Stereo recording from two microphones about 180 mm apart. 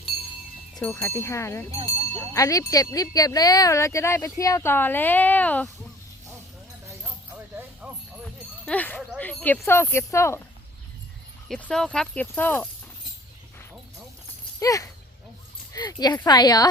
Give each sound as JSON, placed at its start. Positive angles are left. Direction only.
{"t": 0.8, "sound": "speech", "side_deg": 10}
{"t": 1.7, "sound": "speech", "side_deg": -30}
{"t": 2.1, "sound": "speech", "side_deg": 20}
{"t": 7.0, "sound": "a sound", "side_deg": -10}
{"t": 8.6, "sound": "speech", "side_deg": 10}
{"t": 11.4, "sound": "speech", "side_deg": 5}
{"t": 14.6, "sound": "speech", "side_deg": 20}